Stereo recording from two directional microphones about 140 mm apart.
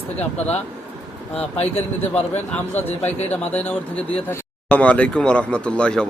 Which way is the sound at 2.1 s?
10° left (ahead or behind).